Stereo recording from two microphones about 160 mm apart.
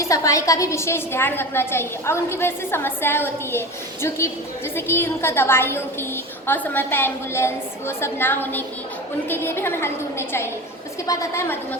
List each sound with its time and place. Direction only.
0.0 s a woman's voice: 20° left (ahead or behind)
4.7 s a woman's voice: 15° left (ahead or behind)